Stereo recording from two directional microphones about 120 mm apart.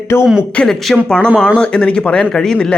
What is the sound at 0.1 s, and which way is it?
Speech, 20° left (ahead or behind).